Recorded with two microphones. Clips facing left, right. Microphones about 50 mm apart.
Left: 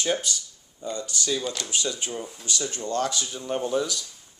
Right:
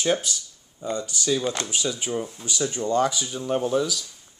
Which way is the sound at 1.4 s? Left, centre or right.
Right.